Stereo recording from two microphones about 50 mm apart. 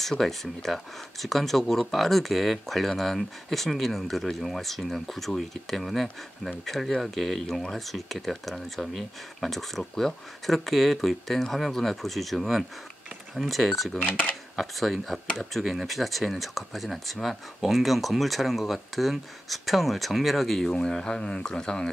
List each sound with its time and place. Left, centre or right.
0.0 s speech: centre
13.9 s speech: left
14.6 s speech: centre